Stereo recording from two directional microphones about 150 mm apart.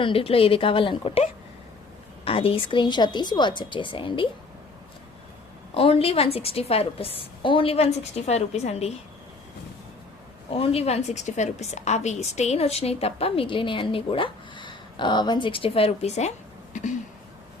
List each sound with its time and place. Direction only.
0.0 s a woman's voice: 35° left (ahead or behind)
5.7 s a woman's voice: 40° left (ahead or behind)
10.5 s a woman's voice: 40° left (ahead or behind)
16.7 s a sound: 55° left (ahead or behind)